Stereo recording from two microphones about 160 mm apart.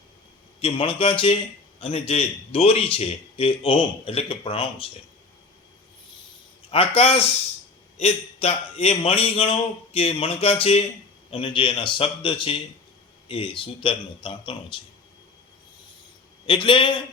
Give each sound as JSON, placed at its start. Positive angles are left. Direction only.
{"t": 0.6, "sound": "a man's voice", "side_deg": 35}
{"t": 6.7, "sound": "a man's voice", "side_deg": 35}
{"t": 16.5, "sound": "a man's voice", "side_deg": 30}